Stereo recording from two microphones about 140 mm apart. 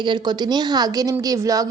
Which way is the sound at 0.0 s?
30° right (ahead or behind).